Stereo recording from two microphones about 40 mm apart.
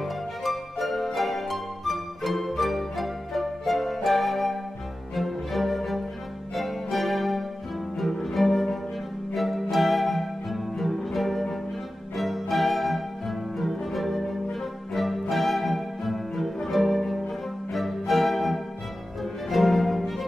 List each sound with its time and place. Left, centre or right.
0.0 s music: centre